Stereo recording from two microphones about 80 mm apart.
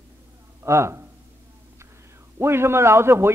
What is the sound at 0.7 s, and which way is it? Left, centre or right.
Speech, right.